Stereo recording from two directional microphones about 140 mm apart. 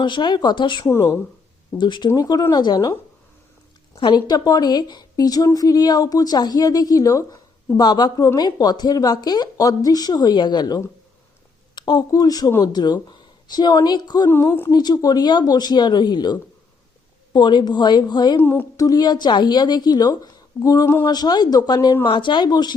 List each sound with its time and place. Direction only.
0.0 s speech: 35° left (ahead or behind)
0.9 s speech: 20° left (ahead or behind)
1.8 s speech: 35° left (ahead or behind)
14.3 s speech: 15° left (ahead or behind)
14.7 s speech: 30° left (ahead or behind)
18.3 s speech: 15° left (ahead or behind)